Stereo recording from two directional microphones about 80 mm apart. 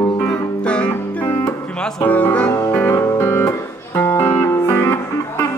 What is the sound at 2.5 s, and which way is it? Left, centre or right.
Music, left.